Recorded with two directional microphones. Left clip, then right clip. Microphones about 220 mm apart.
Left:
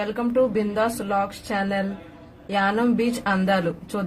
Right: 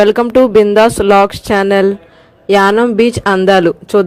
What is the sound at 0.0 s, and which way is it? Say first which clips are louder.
Speech: right 14 dB; 45° right (ahead or behind).